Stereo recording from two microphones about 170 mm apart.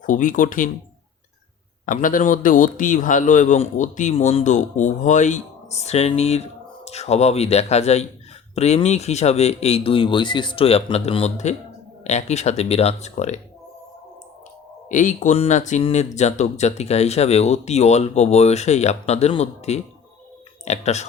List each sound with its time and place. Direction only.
0.0 s a man's voice: 50° left (ahead or behind)
1.9 s a man's voice: 50° left (ahead or behind)
14.8 s speech: 45° left (ahead or behind)